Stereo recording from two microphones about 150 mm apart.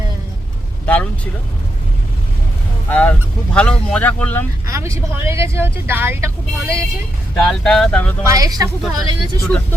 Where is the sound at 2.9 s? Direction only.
10° left (ahead or behind).